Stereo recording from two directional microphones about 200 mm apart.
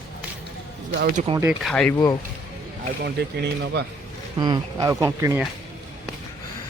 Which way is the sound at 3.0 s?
55° right (ahead or behind).